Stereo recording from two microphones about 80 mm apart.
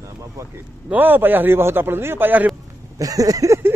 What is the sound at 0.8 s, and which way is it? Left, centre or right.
A man's voice, right.